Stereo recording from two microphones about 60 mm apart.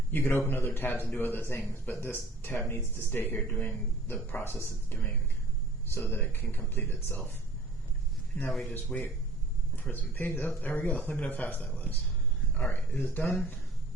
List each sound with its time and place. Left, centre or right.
0.1 s speech: left
8.4 s speech: centre
9.9 s speech: left
13.2 s speech: centre